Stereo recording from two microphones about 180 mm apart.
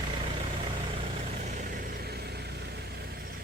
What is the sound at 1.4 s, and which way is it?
Vehicle, 40° right (ahead or behind).